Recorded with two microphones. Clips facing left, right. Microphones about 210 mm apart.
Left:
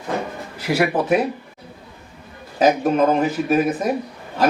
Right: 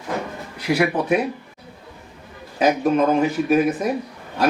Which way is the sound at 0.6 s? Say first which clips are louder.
Even; 5° left (ahead or behind).